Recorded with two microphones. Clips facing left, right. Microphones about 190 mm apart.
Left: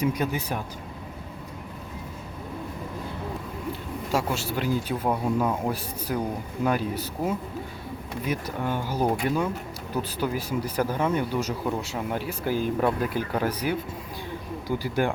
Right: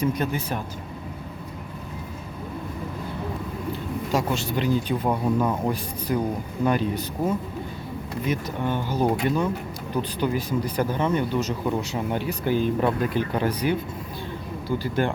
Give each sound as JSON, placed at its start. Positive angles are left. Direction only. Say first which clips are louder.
{"t": 0.0, "sound": "speech", "louder": "right 1 dB", "side_deg": 10}
{"t": 4.1, "sound": "speech", "louder": "right 2 dB", "side_deg": 10}
{"t": 14.7, "sound": "speech", "louder": "right 1 dB", "side_deg": 10}